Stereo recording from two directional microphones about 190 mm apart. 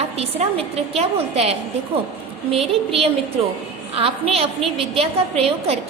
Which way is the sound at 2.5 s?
30° right (ahead or behind).